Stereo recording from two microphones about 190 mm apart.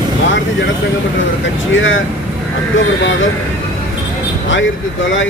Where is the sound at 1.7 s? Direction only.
90° left.